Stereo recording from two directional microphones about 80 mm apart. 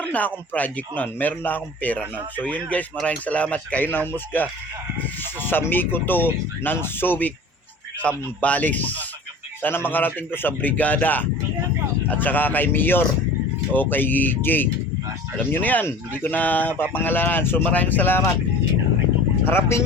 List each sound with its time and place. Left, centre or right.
0.0 s speech: left
19.5 s speech: left